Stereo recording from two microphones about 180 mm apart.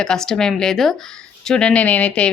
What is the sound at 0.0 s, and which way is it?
A woman's voice, 5° left (ahead or behind).